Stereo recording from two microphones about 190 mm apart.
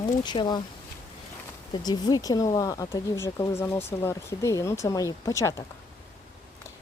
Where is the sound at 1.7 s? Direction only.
20° left (ahead or behind).